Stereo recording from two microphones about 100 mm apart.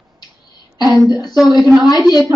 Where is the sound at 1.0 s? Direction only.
40° left (ahead or behind).